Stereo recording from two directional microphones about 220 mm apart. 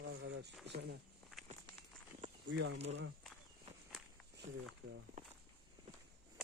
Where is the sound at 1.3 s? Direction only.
Centre (ahead or behind).